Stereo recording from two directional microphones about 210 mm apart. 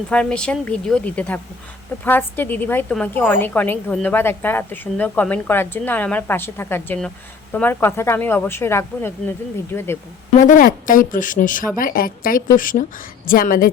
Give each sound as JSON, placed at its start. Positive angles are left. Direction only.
{"t": 0.1, "sound": "a woman's voice", "side_deg": 5}
{"t": 10.4, "sound": "a woman's voice", "side_deg": 40}